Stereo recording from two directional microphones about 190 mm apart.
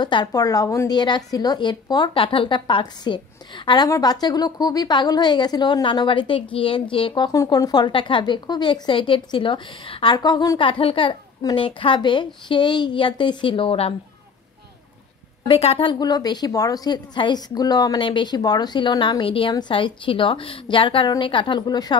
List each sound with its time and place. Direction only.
0.0 s a woman's voice: 25° left (ahead or behind)
15.4 s a woman's voice: 30° left (ahead or behind)